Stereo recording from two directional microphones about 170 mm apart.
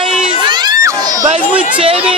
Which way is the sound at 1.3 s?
35° right (ahead or behind).